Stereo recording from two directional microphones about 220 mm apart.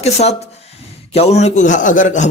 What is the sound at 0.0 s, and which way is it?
A man's voice, 30° left (ahead or behind).